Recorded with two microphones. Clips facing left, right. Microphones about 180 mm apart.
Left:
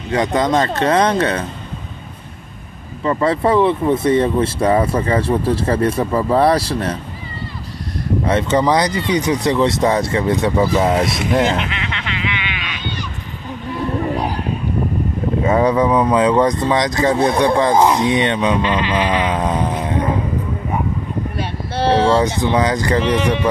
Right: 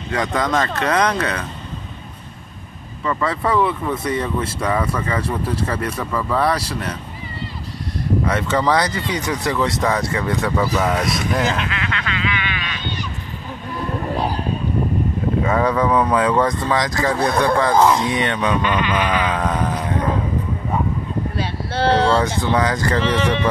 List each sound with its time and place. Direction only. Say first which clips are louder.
0.1 s speech: left 4 dB; 25° left (ahead or behind)
3.0 s speech: left 5 dB; 30° left (ahead or behind)
8.3 s speech: left 5 dB; 25° left (ahead or behind)
15.4 s speech: left 5 dB; 20° left (ahead or behind)
21.9 s speech: left 4 dB; 15° left (ahead or behind)